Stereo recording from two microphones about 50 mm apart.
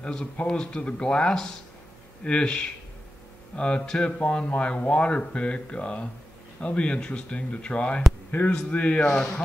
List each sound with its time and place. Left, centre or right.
0.0 s speech: centre
8.3 s speech: left